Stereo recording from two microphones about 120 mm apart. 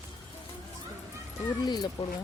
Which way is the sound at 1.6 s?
35° left (ahead or behind).